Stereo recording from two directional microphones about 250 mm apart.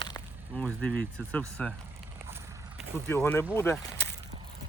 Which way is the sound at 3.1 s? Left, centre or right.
Centre.